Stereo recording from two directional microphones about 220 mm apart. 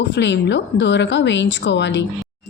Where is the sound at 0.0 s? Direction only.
55° left (ahead or behind).